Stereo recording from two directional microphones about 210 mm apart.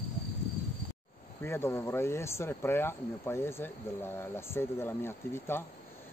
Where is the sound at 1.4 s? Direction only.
10° left (ahead or behind).